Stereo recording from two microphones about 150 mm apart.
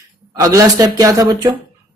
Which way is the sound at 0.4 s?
20° right (ahead or behind).